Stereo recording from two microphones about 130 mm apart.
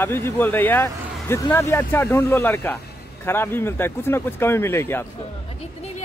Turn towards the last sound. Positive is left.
turn(degrees=20)  # may be behind; listen again after turning